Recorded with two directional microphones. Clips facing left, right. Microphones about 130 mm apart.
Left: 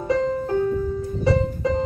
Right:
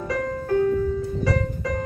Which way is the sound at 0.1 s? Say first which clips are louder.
Left 3 dB; 20° left (ahead or behind).